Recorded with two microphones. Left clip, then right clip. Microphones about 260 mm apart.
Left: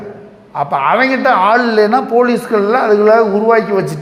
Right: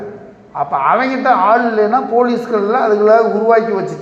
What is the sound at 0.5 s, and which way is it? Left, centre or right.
A man's voice, left.